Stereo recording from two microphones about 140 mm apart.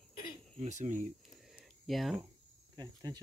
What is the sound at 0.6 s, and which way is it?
Speech, 55° right (ahead or behind).